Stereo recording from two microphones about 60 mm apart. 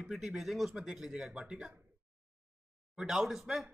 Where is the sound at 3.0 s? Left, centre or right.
Centre.